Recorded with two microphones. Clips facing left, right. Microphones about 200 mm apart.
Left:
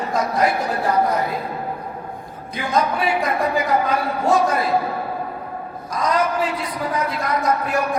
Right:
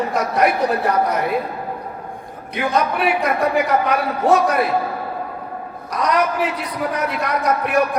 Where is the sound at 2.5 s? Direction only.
70° right (ahead or behind).